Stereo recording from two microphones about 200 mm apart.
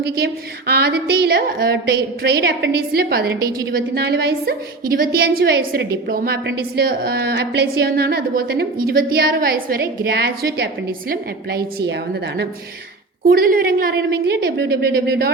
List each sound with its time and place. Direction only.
0.7 s a woman's voice: 50° right (ahead or behind)